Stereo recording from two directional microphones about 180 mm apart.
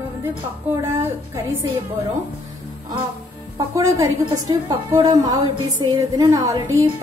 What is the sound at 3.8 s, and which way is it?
A woman's voice, 20° right (ahead or behind).